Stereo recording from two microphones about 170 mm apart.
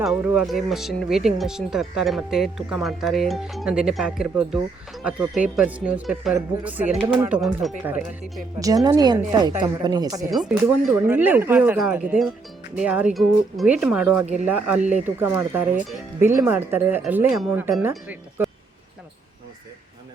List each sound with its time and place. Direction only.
0.0 s a woman's voice: centre (ahead or behind); by 10.3 s 20° right (ahead or behind)
10.3 s speech: centre (ahead or behind)
14.8 s speech: 45° right (ahead or behind)
15.0 s speech: 15° right (ahead or behind)